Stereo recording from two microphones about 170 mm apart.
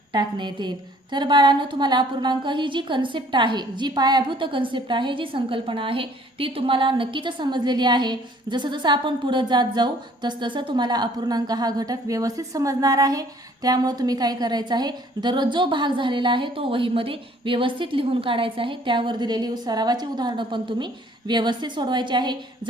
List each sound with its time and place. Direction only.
0.1 s a woman's voice: 25° right (ahead or behind)